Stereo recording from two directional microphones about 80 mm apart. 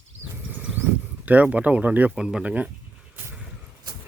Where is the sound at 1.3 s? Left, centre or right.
Centre.